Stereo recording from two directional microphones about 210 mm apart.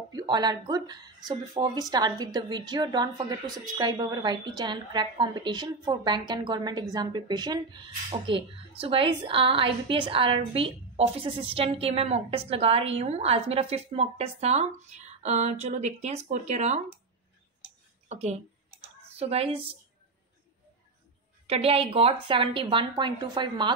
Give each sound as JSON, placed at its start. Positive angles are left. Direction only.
{"t": 0.1, "sound": "speech", "side_deg": -20}
{"t": 18.0, "sound": "a woman's voice", "side_deg": -30}
{"t": 21.5, "sound": "speech", "side_deg": -25}